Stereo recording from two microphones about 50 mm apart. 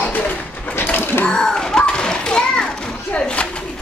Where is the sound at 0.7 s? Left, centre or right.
Left.